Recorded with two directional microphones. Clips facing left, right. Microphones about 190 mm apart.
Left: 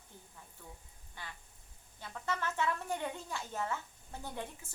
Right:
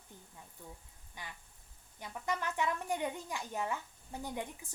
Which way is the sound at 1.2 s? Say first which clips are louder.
Even; 15° right (ahead or behind).